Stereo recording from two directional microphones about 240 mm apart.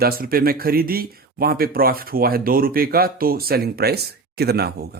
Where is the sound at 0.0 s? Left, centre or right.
Right.